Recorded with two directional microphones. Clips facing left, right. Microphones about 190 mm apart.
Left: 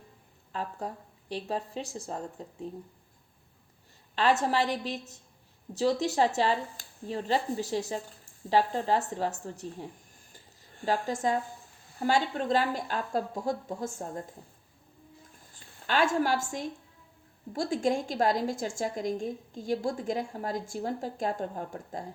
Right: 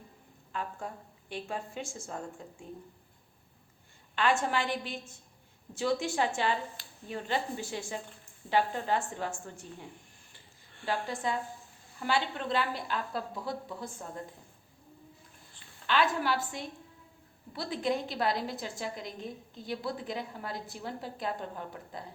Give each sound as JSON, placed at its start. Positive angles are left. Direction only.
{"t": 0.5, "sound": "speech", "side_deg": 35}
{"t": 4.1, "sound": "speech", "side_deg": 35}
{"t": 10.3, "sound": "a sound", "side_deg": 40}
{"t": 11.9, "sound": "a woman's voice", "side_deg": 40}
{"t": 15.5, "sound": "a woman's voice", "side_deg": 45}